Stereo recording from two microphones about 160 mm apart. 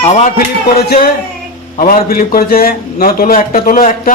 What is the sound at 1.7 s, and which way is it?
A man's voice, 60° left (ahead or behind).